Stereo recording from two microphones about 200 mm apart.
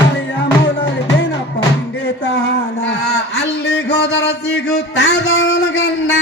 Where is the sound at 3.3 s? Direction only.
60° left (ahead or behind).